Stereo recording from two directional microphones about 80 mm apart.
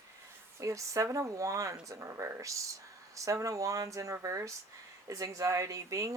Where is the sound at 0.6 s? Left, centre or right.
Right.